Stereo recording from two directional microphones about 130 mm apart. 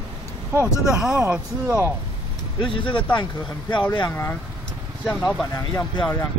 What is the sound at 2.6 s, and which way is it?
Speech, 40° left (ahead or behind).